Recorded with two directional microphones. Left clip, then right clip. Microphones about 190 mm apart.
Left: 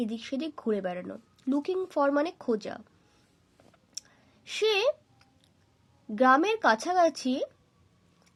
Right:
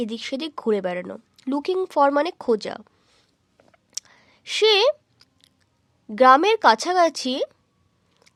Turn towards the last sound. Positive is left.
turn(degrees=-45)  # may be behind; listen again after turning